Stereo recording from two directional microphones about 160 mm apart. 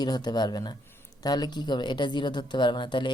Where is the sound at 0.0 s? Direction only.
25° left (ahead or behind).